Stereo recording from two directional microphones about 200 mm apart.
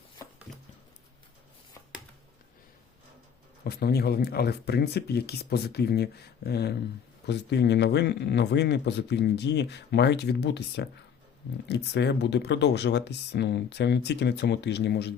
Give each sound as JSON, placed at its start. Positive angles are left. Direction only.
{"t": 0.5, "sound": "music", "side_deg": 0}
{"t": 3.6, "sound": "speech", "side_deg": 50}